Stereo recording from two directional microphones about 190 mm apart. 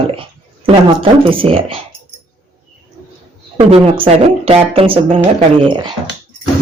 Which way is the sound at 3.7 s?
30° right (ahead or behind).